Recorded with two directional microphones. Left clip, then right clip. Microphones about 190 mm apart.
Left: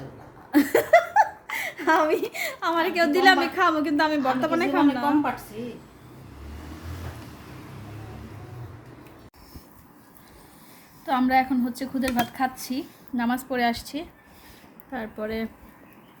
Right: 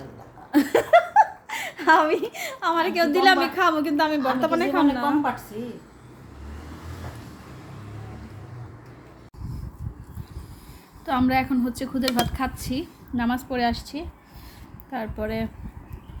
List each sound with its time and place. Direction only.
0.5 s a woman's voice: 5° right (ahead or behind)
11.0 s a woman's voice: 10° right (ahead or behind)
14.9 s a woman's voice: 10° right (ahead or behind)